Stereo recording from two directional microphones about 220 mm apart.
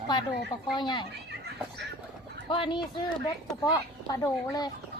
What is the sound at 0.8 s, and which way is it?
Speech, 20° left (ahead or behind).